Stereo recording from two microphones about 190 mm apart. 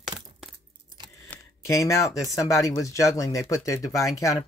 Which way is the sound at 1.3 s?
15° left (ahead or behind).